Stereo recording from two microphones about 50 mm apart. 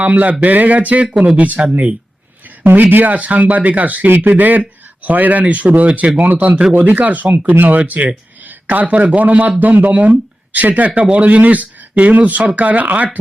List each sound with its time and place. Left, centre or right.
0.0 s speech: right
2.9 s a man's voice: right